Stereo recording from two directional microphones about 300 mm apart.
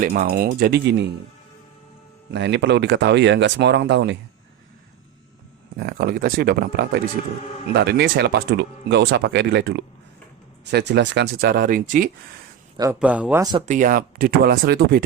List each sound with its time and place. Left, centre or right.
0.0 s speech: right
2.3 s speech: right
5.7 s speech: right
12.7 s speech: centre; by 15.0 s right